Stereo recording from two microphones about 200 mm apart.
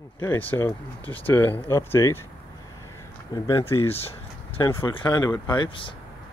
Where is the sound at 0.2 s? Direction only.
10° left (ahead or behind).